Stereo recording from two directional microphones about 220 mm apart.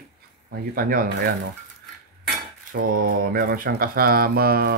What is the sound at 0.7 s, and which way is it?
Speech, 40° right (ahead or behind).